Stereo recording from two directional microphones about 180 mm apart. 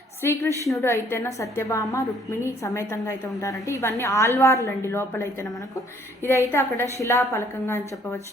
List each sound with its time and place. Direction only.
0.2 s a woman's voice: 15° left (ahead or behind)